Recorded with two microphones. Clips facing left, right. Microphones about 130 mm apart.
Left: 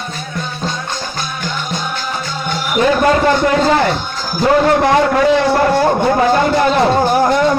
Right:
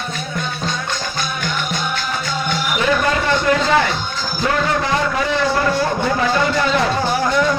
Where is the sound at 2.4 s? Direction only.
40° left (ahead or behind).